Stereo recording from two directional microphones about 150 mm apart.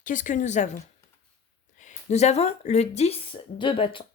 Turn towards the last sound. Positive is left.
turn(degrees=35)  # may be behind; listen again after turning